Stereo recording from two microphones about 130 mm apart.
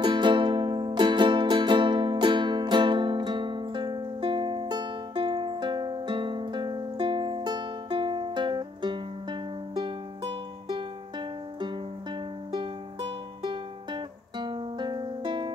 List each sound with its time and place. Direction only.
0.0 s music: 35° right (ahead or behind)